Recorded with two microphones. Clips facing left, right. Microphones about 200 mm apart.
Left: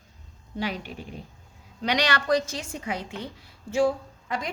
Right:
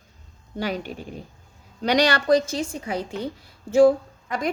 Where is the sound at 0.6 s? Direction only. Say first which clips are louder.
Right 4 dB; 45° right (ahead or behind).